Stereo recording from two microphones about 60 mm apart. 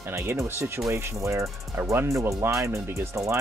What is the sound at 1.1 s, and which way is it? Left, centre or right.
Speech, right.